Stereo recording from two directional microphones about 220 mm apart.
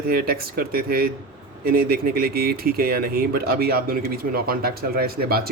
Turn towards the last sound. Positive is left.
turn(degrees=-45)  # may be behind; listen again after turning